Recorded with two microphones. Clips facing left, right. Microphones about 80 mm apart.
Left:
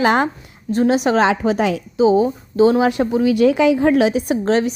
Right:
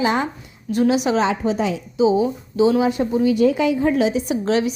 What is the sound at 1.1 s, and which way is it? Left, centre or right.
Speech, left.